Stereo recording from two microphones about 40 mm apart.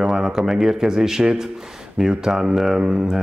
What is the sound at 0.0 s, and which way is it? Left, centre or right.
Speech, centre.